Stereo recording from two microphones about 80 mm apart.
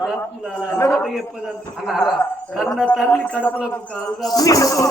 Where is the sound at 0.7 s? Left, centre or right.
Left.